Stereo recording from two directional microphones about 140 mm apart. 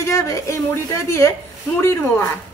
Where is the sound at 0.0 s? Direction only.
25° left (ahead or behind).